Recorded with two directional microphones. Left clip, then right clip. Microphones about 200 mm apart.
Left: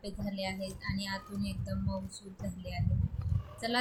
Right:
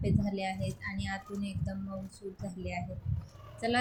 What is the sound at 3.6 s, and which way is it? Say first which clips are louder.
Speech: right 3 dB; 5° right (ahead or behind).